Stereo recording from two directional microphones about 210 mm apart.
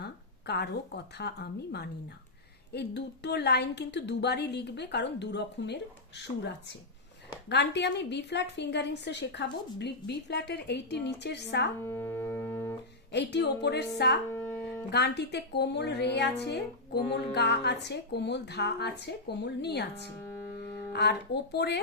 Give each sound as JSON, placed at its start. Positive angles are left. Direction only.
{"t": 0.0, "sound": "a woman's voice", "side_deg": 50}
{"t": 11.9, "sound": "music", "side_deg": 10}
{"t": 13.1, "sound": "a woman's voice", "side_deg": 55}
{"t": 14.3, "sound": "music", "side_deg": 5}
{"t": 14.8, "sound": "a woman's voice", "side_deg": 55}